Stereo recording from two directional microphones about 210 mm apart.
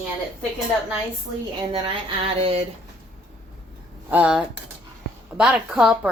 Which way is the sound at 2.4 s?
25° right (ahead or behind).